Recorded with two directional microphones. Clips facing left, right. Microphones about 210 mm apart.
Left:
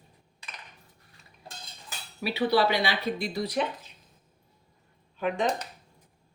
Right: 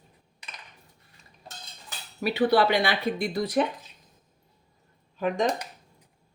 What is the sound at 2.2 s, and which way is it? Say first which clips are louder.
Speech: right 3 dB; 50° right (ahead or behind).